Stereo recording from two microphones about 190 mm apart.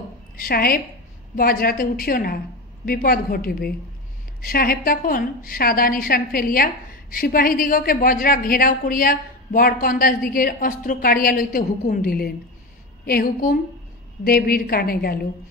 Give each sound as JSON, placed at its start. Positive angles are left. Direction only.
{"t": 0.4, "sound": "a woman's voice", "side_deg": 50}